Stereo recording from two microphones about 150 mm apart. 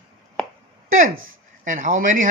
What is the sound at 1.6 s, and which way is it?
Speech, 55° right (ahead or behind).